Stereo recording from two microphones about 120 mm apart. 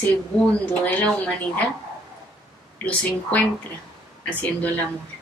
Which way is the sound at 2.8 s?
15° left (ahead or behind).